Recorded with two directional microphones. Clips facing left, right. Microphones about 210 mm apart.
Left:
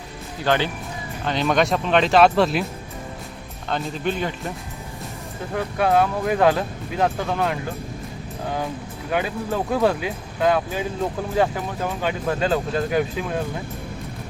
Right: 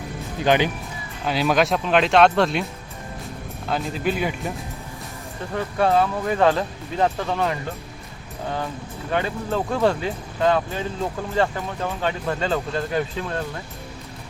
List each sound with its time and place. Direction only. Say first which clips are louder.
0.4 s speech: right 2 dB; 15° right (ahead or behind)
1.2 s speech: even; 5° right (ahead or behind)
3.7 s speech: right 1 dB; 5° right (ahead or behind)
5.5 s speech: even; 5° left (ahead or behind)
9.0 s speech: even; 5° left (ahead or behind)